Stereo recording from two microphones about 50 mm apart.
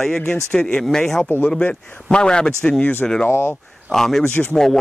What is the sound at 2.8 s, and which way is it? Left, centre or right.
Speech, left.